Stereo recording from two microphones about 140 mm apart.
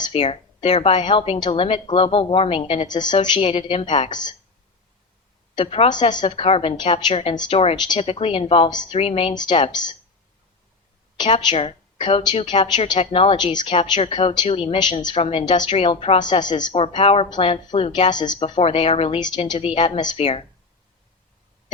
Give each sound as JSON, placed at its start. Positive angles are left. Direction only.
{"t": 0.1, "sound": "a woman's voice", "side_deg": 45}
{"t": 2.9, "sound": "a woman's voice", "side_deg": 30}
{"t": 3.5, "sound": "a woman's voice", "side_deg": 45}
{"t": 5.5, "sound": "a woman's voice", "side_deg": 40}
{"t": 8.0, "sound": "a woman's voice", "side_deg": 40}
{"t": 11.5, "sound": "a woman's voice", "side_deg": 40}
{"t": 18.1, "sound": "a woman's voice", "side_deg": 30}
{"t": 20.1, "sound": "a woman's voice", "side_deg": 45}